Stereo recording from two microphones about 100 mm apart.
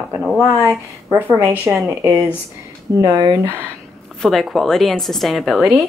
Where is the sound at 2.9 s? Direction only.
40° right (ahead or behind).